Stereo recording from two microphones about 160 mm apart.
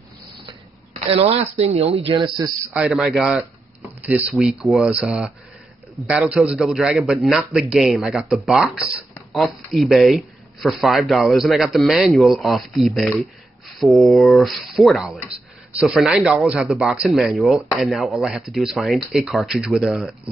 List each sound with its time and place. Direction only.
0.5 s a sound: 40° right (ahead or behind)
1.6 s speech: 40° right (ahead or behind)
2.7 s speech: 5° right (ahead or behind)